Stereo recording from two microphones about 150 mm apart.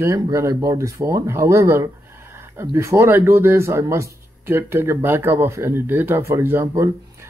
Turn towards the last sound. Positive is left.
turn(degrees=-20)  # may be behind; listen again after turning